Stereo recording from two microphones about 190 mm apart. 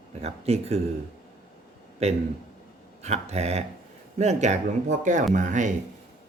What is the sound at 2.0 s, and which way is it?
Speech, 35° right (ahead or behind).